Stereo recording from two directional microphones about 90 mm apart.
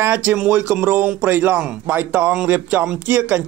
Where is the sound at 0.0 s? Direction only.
20° right (ahead or behind).